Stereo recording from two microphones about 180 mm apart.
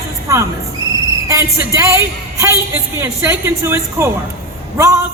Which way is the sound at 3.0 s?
15° right (ahead or behind).